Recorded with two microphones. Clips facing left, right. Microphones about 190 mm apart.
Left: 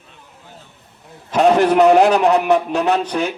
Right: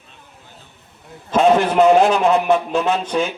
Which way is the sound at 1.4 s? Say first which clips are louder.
Left 1 dB; 65° left (ahead or behind).